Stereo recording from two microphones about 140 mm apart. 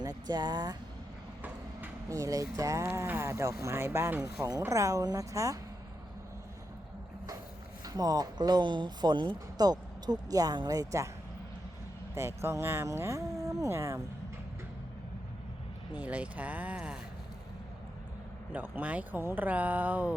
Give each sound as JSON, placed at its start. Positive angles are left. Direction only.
{"t": 0.0, "sound": "speech", "side_deg": -25}
{"t": 2.0, "sound": "speech", "side_deg": -20}
{"t": 7.9, "sound": "speech", "side_deg": -25}
{"t": 12.1, "sound": "speech", "side_deg": -20}
{"t": 16.0, "sound": "speech", "side_deg": -10}
{"t": 18.5, "sound": "speech", "side_deg": -10}